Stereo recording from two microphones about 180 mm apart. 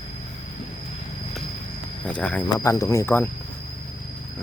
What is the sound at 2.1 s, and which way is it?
Speech, 5° left (ahead or behind).